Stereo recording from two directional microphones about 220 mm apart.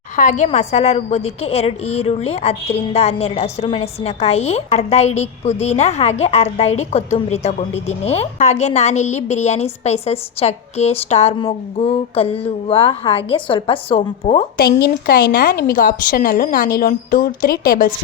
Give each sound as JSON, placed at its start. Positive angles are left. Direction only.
{"t": 0.2, "sound": "a woman's voice", "side_deg": 35}
{"t": 14.6, "sound": "a woman's voice", "side_deg": 45}